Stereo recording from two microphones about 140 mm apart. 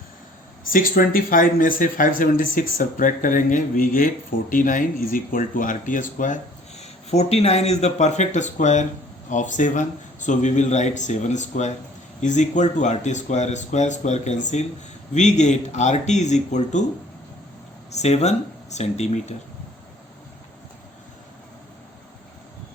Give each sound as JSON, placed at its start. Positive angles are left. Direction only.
{"t": 0.7, "sound": "speech", "side_deg": 90}
{"t": 17.9, "sound": "speech", "side_deg": 50}